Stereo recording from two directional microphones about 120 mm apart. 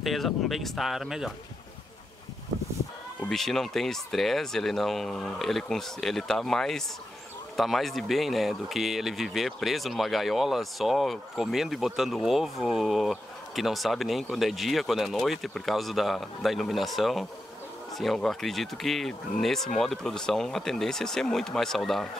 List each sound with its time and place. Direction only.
0.0 s speech: centre (ahead or behind)
3.3 s speech: 5° left (ahead or behind)